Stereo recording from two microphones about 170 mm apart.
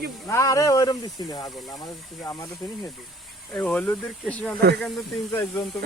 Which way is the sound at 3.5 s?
10° left (ahead or behind).